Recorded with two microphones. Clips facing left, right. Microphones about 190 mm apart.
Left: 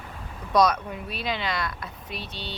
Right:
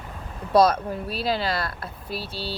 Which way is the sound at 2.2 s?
5° right (ahead or behind).